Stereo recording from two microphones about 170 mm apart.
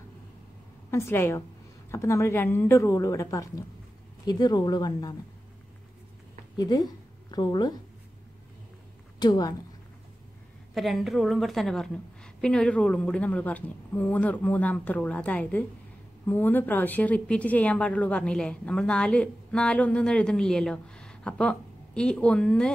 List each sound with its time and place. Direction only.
0.8 s a woman's voice: 15° left (ahead or behind)
6.5 s a woman's voice: 25° left (ahead or behind)
9.2 s speech: 25° left (ahead or behind)
10.7 s a woman's voice: centre (ahead or behind)